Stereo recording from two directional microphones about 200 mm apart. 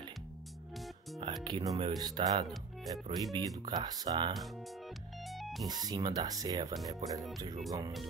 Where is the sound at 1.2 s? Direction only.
20° right (ahead or behind).